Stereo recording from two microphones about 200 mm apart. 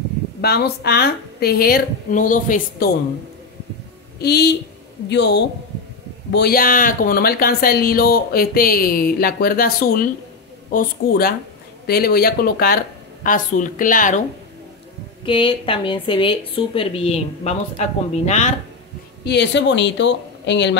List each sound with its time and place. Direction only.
0.4 s speech: 50° left (ahead or behind)
4.2 s a woman's voice: 55° left (ahead or behind)
15.2 s a woman's voice: 25° left (ahead or behind)
19.2 s a woman's voice: 60° left (ahead or behind)